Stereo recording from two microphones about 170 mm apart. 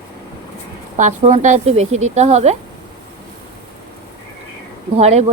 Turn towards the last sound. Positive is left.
turn(degrees=-40)  # may be behind; listen again after turning